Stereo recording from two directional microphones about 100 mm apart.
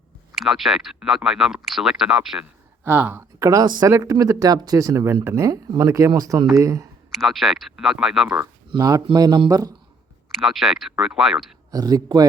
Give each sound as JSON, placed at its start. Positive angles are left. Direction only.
{"t": 0.3, "sound": "speech", "side_deg": 0}
{"t": 2.8, "sound": "speech", "side_deg": -20}
{"t": 3.4, "sound": "speech", "side_deg": -35}
{"t": 7.1, "sound": "speech", "side_deg": 0}
{"t": 8.7, "sound": "speech", "side_deg": -40}
{"t": 10.3, "sound": "speech", "side_deg": 0}
{"t": 11.7, "sound": "speech", "side_deg": -40}